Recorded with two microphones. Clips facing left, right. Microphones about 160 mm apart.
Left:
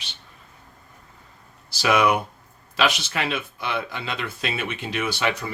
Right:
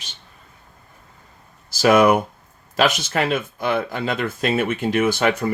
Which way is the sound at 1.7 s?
45° right (ahead or behind).